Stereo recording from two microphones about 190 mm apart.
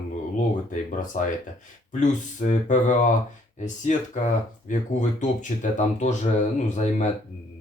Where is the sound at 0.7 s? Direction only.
40° left (ahead or behind).